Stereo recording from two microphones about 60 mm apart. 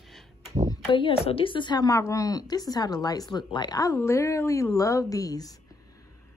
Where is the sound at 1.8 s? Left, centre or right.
Left.